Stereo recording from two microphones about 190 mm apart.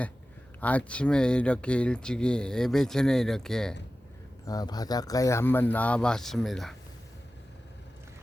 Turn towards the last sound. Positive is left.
turn(degrees=0)  # may be behind; listen again after turning